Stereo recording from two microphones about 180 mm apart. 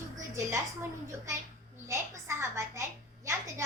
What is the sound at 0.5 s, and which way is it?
Speech, 15° right (ahead or behind).